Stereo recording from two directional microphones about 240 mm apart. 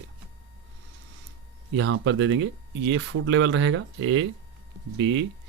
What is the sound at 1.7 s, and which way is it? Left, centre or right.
Speech, right.